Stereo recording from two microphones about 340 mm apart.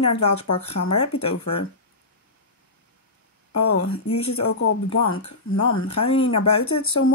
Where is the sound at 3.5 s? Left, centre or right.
Left.